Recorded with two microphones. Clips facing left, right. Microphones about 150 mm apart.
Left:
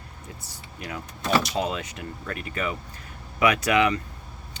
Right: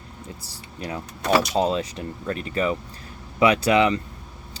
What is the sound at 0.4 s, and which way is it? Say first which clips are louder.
Speech: right 4 dB; 30° right (ahead or behind).